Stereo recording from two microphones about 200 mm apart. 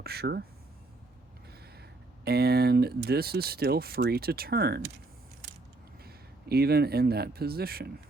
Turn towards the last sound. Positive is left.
turn(degrees=-50)  # may be behind; listen again after turning